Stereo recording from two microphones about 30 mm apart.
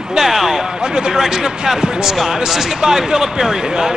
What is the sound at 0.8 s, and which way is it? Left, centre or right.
Speech, right.